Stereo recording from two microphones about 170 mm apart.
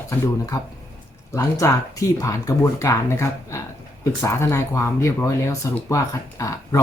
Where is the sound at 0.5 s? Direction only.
20° left (ahead or behind).